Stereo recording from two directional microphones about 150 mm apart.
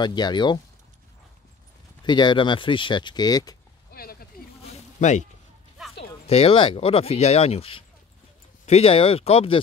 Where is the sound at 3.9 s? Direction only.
85° left.